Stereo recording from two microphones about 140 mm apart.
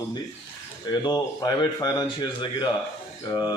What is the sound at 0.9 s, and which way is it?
Speech, 30° left (ahead or behind).